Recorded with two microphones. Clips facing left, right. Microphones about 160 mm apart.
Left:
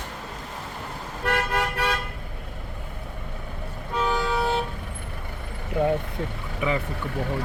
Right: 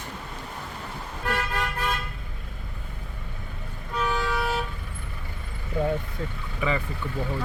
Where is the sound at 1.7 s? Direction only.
80° left.